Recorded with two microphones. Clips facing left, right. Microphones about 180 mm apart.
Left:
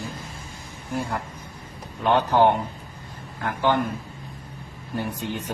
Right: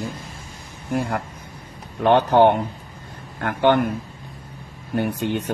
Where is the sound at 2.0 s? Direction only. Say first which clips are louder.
Right 4 dB; 65° right (ahead or behind).